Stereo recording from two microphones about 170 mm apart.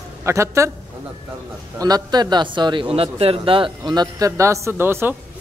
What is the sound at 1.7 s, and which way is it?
A man's voice, 20° right (ahead or behind).